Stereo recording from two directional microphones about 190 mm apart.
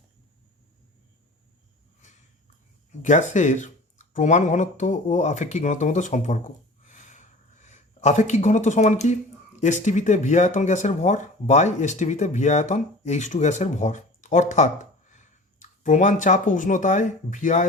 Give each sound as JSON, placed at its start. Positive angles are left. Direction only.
{"t": 3.0, "sound": "speech", "side_deg": 40}
{"t": 6.8, "sound": "a sound", "side_deg": 40}
{"t": 9.6, "sound": "speech", "side_deg": 40}